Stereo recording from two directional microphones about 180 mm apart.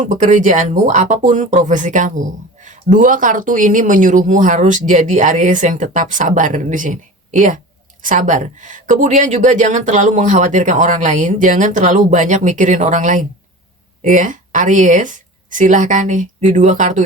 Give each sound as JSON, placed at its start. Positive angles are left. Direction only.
{"t": 0.0, "sound": "speech", "side_deg": -45}